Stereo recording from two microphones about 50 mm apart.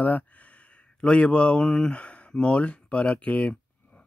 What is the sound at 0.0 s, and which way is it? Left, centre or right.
Speech, left.